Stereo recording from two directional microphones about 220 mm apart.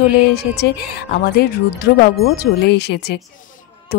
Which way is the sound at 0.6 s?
45° left (ahead or behind).